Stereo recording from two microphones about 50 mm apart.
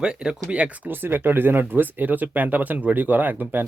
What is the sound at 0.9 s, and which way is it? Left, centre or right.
Speech, right.